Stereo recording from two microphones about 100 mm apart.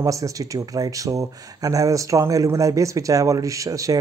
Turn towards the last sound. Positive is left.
turn(degrees=-35)  # may be behind; listen again after turning